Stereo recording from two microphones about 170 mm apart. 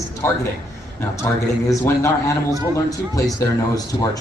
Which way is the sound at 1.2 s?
10° left (ahead or behind).